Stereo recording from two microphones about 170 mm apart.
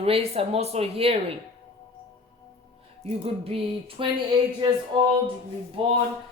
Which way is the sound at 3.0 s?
35° right (ahead or behind).